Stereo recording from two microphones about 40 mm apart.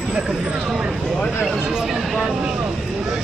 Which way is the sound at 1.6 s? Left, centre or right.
Right.